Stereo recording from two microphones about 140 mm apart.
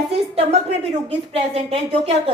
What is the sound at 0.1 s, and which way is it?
A woman's voice, 45° right (ahead or behind).